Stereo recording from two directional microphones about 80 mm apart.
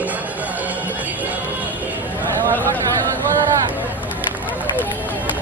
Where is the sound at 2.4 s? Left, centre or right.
Right.